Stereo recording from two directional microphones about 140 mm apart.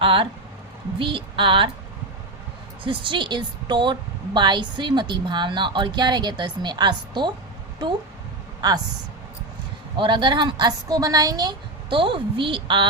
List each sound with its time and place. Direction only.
0.0 s a woman's voice: 40° right (ahead or behind)
2.8 s a woman's voice: 35° right (ahead or behind)
8.6 s speech: 25° right (ahead or behind)
10.0 s a woman's voice: 35° right (ahead or behind)